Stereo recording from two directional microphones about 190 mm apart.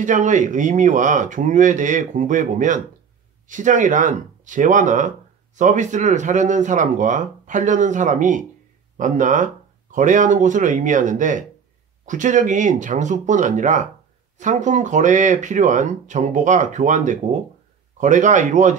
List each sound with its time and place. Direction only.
0.0 s speech: 40° right (ahead or behind)